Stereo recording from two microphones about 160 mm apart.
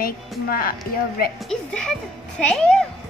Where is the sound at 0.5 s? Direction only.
65° left (ahead or behind).